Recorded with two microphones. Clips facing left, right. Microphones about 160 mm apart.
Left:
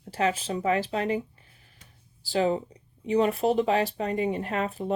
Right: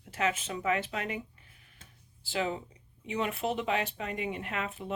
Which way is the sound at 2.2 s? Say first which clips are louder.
Left 8 dB; 35° left (ahead or behind).